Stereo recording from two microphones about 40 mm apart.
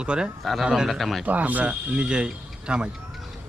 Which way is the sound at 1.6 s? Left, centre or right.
Right.